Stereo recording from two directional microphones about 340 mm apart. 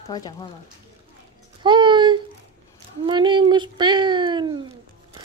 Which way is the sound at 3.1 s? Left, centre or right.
Centre.